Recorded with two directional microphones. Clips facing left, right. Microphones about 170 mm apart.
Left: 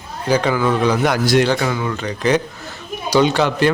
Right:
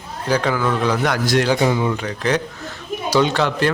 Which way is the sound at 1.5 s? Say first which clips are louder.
Right 3 dB; 25° right (ahead or behind).